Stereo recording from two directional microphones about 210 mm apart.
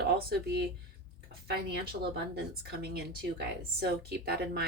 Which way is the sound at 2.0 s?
40° right (ahead or behind).